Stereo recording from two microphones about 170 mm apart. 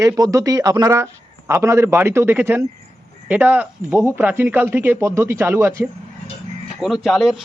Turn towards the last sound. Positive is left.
turn(degrees=0)  # may be behind; listen again after turning